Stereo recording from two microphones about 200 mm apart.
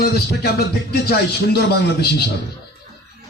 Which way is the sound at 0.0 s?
55° left (ahead or behind).